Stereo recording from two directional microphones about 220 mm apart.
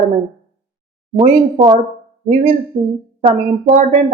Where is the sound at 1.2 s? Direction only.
25° right (ahead or behind).